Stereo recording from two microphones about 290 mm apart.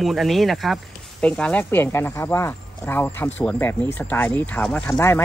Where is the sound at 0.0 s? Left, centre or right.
Centre.